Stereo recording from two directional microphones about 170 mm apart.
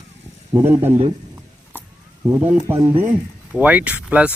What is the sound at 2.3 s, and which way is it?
A man's voice, 10° right (ahead or behind).